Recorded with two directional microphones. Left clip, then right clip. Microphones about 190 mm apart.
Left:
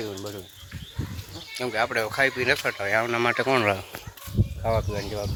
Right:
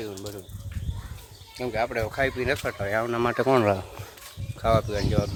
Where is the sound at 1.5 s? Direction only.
5° right (ahead or behind).